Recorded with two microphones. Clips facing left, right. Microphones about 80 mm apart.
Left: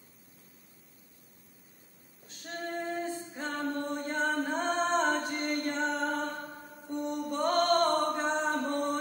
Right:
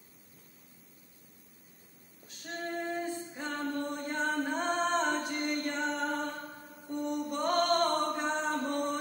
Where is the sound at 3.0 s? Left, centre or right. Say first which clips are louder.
Even; centre.